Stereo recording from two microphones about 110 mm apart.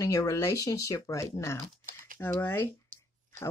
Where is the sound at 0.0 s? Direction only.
30° left (ahead or behind).